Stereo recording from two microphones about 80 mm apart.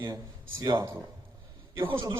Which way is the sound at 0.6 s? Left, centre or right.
Right.